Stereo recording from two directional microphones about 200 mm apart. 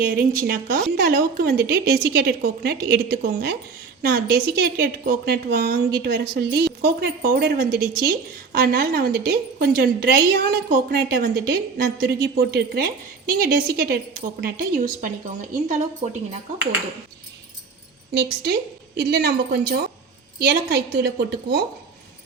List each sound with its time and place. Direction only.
0.0 s a woman's voice: 45° right (ahead or behind)
18.1 s a woman's voice: 55° right (ahead or behind)
20.5 s a woman's voice: 60° right (ahead or behind)